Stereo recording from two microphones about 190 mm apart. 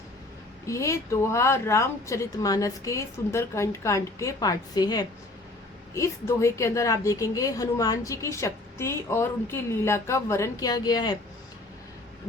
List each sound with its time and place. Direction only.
0.7 s a woman's voice: 15° left (ahead or behind)